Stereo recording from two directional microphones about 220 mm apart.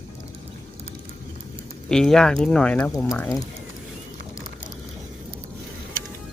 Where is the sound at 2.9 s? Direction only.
15° left (ahead or behind).